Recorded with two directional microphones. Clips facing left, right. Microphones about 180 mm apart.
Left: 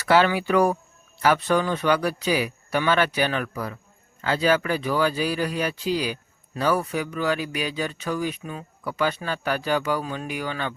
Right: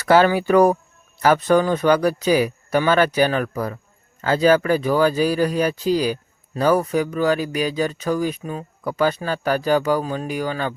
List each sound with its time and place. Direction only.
0.1 s speech: 45° right (ahead or behind)